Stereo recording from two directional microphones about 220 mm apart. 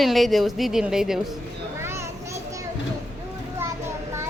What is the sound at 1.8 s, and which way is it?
Children playing, 10° right (ahead or behind).